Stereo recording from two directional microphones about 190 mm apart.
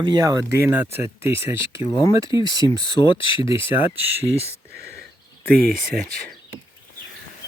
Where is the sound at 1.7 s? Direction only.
25° left (ahead or behind).